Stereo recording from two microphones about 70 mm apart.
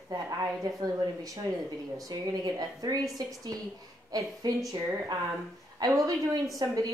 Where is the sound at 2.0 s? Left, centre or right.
Right.